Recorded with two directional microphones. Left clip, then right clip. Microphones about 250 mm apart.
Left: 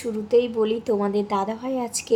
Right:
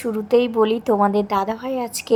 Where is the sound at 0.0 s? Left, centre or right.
Right.